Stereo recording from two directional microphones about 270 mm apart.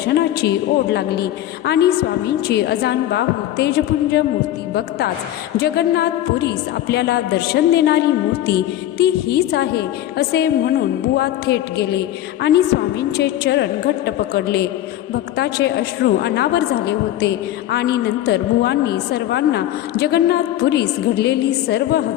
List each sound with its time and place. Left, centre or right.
0.0 s a woman's voice: left